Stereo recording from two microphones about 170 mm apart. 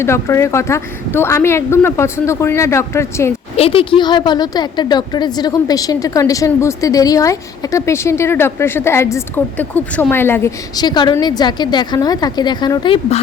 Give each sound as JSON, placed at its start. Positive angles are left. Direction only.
{"t": 0.0, "sound": "a woman's voice", "side_deg": 15}
{"t": 3.6, "sound": "a woman's voice", "side_deg": 35}